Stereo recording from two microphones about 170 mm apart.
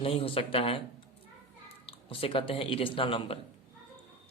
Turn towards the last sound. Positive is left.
turn(degrees=30)  # may be behind; listen again after turning